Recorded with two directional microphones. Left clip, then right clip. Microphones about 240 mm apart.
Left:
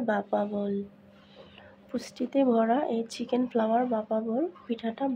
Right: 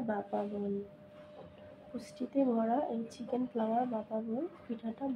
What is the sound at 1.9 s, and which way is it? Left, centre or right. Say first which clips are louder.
Speech: left 7 dB; left.